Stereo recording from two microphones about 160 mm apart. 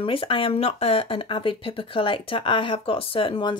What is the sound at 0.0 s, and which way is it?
Speech, 35° left (ahead or behind).